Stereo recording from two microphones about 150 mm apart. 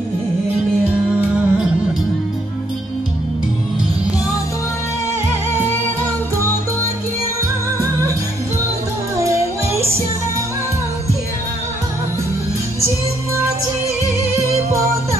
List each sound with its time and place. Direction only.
0.8 s music: 10° right (ahead or behind)
9.1 s music: 20° right (ahead or behind)